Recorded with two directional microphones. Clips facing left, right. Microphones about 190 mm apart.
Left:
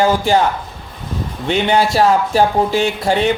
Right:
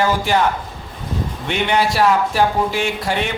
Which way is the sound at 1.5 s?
35° left (ahead or behind).